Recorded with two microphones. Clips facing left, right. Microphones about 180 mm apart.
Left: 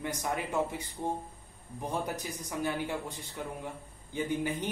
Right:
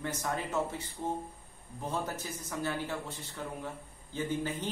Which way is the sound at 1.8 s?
15° left (ahead or behind).